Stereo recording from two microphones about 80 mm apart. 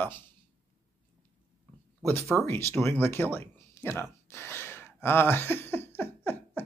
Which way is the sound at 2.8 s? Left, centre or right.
Left.